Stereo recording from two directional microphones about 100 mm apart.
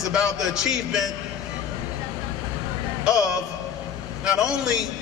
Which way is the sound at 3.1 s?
35° left (ahead or behind).